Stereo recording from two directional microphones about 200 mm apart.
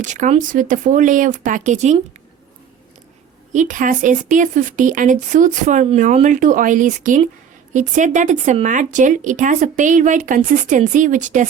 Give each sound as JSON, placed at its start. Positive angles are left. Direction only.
{"t": 0.0, "sound": "speech", "side_deg": -40}
{"t": 3.5, "sound": "speech", "side_deg": -40}